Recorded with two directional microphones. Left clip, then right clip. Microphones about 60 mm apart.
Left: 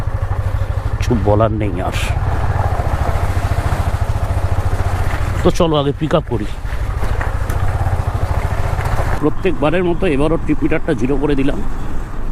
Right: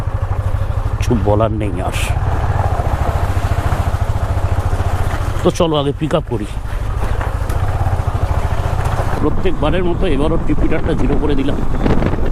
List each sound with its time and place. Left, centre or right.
1.0 s speech: left
2.5 s vehicle: right
5.4 s speech: left
7.9 s vehicle: right
9.4 s speech: left